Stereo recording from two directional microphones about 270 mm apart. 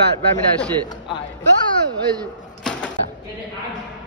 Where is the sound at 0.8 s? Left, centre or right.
Centre.